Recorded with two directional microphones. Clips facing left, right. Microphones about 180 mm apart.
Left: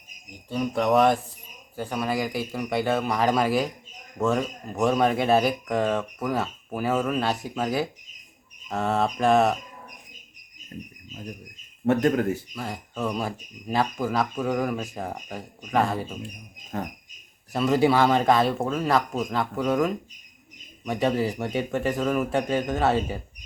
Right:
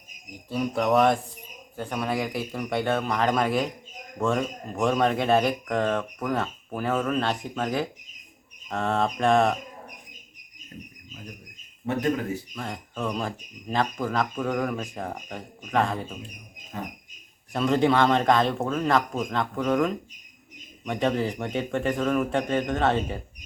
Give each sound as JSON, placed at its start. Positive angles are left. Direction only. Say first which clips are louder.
{"t": 0.5, "sound": "speech", "louder": "left 1 dB", "side_deg": 0}
{"t": 11.9, "sound": "speech", "louder": "left 5 dB", "side_deg": 50}
{"t": 12.5, "sound": "speech", "louder": "left 1 dB", "side_deg": 5}
{"t": 17.5, "sound": "speech", "louder": "left 1 dB", "side_deg": 5}